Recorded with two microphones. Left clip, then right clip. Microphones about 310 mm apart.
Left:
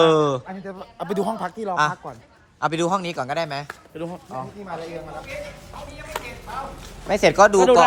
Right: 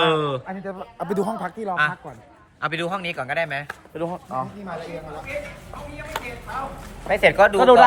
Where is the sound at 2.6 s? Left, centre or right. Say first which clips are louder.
Left 3 dB; centre.